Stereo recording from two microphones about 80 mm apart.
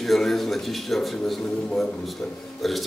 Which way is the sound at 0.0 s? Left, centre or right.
Centre.